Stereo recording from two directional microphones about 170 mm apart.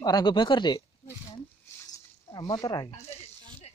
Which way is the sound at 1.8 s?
20° left (ahead or behind).